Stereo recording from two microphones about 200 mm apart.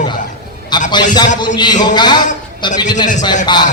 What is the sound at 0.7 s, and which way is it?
A man's voice, 20° left (ahead or behind).